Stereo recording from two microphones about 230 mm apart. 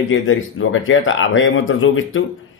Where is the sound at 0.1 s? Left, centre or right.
Left.